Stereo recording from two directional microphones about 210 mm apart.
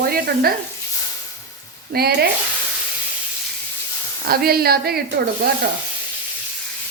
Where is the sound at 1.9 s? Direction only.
50° right (ahead or behind).